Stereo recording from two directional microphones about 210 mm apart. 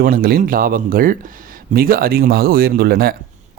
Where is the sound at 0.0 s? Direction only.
45° right (ahead or behind).